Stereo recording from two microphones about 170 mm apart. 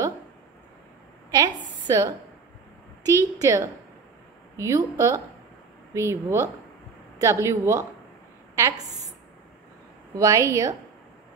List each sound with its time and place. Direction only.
1.3 s a woman's voice: 20° right (ahead or behind)
10.1 s a woman's voice: 20° right (ahead or behind)